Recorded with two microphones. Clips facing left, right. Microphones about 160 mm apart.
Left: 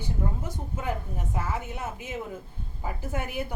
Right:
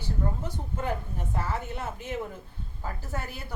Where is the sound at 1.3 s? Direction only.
10° left (ahead or behind).